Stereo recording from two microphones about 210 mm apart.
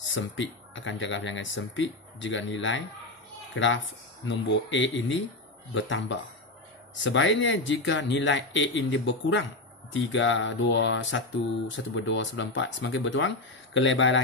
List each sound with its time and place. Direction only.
0.0 s speech: 65° left (ahead or behind)